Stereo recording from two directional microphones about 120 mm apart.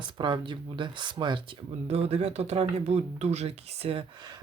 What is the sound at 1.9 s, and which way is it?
Speech, 60° right (ahead or behind).